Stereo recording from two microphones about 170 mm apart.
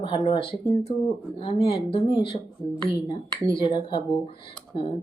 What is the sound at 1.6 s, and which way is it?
A woman's voice, 30° left (ahead or behind).